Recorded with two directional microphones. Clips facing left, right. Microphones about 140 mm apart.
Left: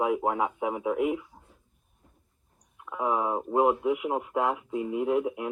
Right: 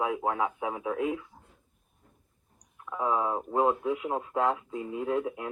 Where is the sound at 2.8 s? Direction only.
20° left (ahead or behind).